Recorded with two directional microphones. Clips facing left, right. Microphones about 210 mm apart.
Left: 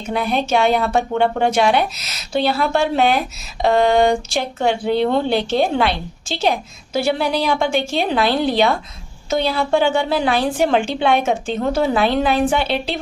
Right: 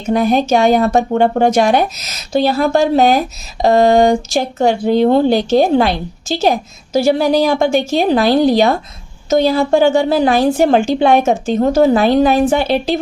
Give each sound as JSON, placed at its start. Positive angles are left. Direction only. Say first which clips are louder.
{"t": 0.1, "sound": "a woman's voice", "louder": "right 6 dB", "side_deg": -40}